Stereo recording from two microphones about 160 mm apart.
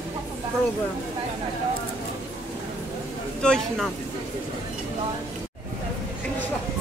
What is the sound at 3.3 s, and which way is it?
Speech, 5° left (ahead or behind).